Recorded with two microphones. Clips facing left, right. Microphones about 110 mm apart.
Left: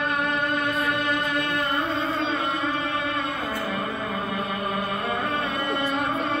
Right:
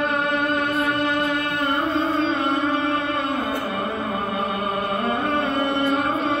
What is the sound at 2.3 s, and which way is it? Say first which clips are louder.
Music: right 5 dB; 30° right (ahead or behind).